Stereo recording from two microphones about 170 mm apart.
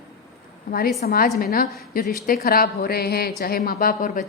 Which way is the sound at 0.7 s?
60° left (ahead or behind).